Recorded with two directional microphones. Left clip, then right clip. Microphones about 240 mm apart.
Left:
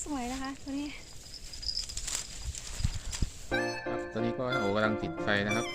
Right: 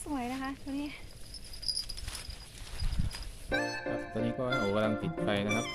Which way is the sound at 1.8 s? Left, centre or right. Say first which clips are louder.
Left 3 dB; left.